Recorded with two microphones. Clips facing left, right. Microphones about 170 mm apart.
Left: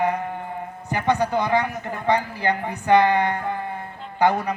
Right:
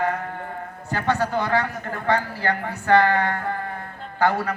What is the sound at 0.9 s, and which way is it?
A man's voice, 15° left (ahead or behind).